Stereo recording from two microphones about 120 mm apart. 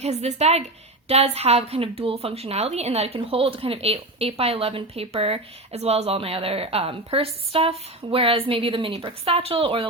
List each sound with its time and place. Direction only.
0.0 s a woman's voice: 65° right (ahead or behind)